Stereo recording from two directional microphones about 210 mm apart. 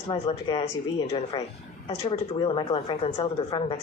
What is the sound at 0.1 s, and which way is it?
Speech, 25° left (ahead or behind).